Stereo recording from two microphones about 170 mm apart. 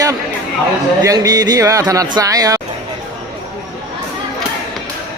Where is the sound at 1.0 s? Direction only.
20° right (ahead or behind).